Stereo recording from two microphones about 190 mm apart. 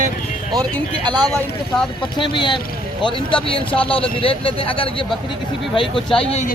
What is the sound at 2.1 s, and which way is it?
A man's voice, 25° left (ahead or behind).